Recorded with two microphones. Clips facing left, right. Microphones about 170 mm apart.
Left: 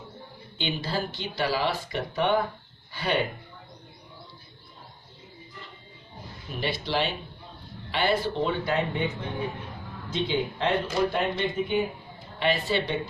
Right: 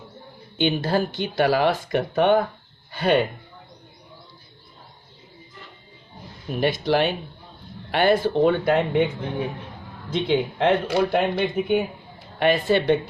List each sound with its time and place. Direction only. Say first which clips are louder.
0.6 s speech: right 8 dB; 50° right (ahead or behind)
6.6 s speech: right 7 dB; 50° right (ahead or behind)
10.1 s speech: right 5 dB; 60° right (ahead or behind)
12.4 s speech: right 6 dB; 50° right (ahead or behind)